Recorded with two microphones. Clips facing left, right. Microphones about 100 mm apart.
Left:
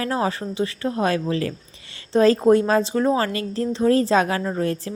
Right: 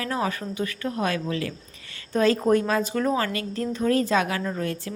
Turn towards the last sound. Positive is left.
turn(degrees=35)  # may be behind; listen again after turning